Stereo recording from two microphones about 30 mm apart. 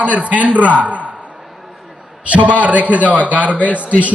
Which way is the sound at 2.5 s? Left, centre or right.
Right.